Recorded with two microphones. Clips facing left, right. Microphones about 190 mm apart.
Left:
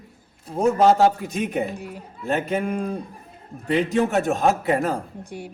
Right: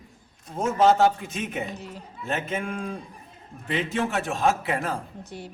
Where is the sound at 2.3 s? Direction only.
35° left (ahead or behind).